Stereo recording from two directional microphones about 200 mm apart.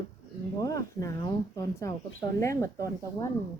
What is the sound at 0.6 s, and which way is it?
Speech, 15° left (ahead or behind).